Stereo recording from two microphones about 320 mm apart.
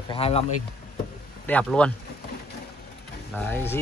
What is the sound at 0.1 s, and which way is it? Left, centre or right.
Speech, centre.